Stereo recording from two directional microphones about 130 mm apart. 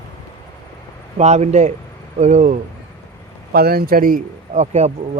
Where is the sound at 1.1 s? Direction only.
60° right (ahead or behind).